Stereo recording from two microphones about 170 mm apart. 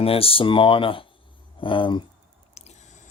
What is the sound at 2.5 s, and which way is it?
Squish, 40° left (ahead or behind).